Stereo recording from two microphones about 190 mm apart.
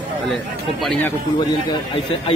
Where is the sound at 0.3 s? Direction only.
Centre (ahead or behind).